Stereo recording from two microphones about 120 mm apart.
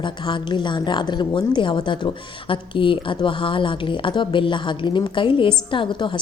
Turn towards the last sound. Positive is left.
turn(degrees=45)  # may be behind; listen again after turning